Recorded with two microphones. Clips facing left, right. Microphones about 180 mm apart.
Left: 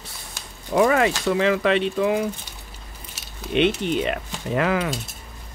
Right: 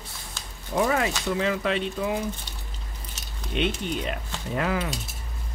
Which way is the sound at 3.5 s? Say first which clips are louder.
Left 7 dB; 75° left (ahead or behind).